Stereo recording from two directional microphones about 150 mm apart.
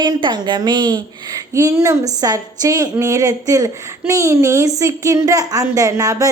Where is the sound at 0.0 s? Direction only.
30° right (ahead or behind).